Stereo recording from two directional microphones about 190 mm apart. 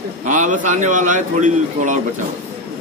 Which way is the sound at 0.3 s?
40° right (ahead or behind).